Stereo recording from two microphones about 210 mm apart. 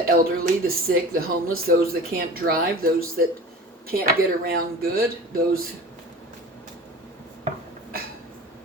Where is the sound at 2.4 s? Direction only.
55° right (ahead or behind).